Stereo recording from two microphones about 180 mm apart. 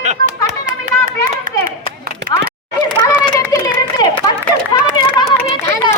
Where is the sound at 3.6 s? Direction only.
20° left (ahead or behind).